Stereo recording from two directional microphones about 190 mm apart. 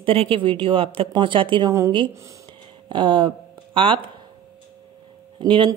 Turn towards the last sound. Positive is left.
turn(degrees=-25)  # may be behind; listen again after turning